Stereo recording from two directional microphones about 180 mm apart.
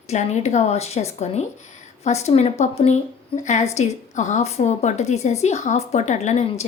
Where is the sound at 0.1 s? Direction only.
40° left (ahead or behind).